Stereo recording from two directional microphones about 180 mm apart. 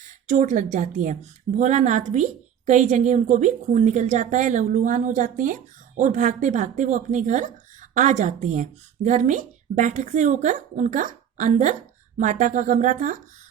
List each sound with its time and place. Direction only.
0.3 s a woman's voice: 45° right (ahead or behind)